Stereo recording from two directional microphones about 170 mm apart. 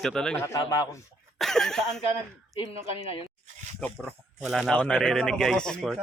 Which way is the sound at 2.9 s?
35° left (ahead or behind).